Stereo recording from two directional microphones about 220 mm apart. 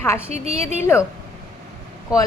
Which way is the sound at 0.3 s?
30° right (ahead or behind).